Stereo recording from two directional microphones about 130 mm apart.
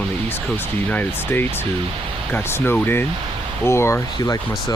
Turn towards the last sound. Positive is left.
turn(degrees=20)  # may be behind; listen again after turning